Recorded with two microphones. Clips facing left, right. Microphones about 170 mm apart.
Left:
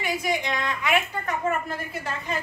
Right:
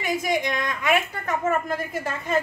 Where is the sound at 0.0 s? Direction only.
45° right (ahead or behind).